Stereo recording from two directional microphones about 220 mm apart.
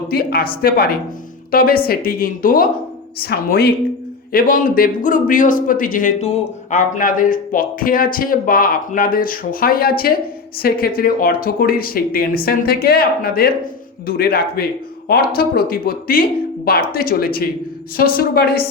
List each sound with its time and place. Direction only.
0.1 s speech: 45° left (ahead or behind)